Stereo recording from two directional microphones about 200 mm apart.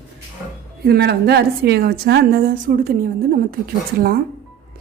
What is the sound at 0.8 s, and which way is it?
A woman's voice, 55° right (ahead or behind).